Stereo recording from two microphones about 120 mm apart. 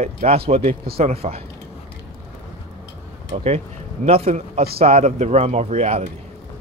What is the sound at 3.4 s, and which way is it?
A man's voice, 60° right (ahead or behind).